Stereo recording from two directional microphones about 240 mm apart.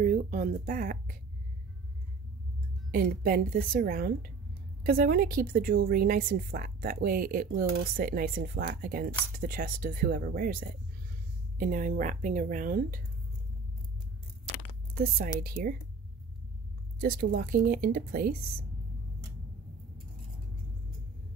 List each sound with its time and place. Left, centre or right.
0.0 s speech: right
2.9 s a woman's voice: right
15.0 s a woman's voice: right
17.0 s a woman's voice: right